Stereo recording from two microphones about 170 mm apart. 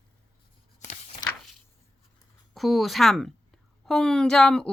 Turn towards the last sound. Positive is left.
turn(degrees=5)  # may be behind; listen again after turning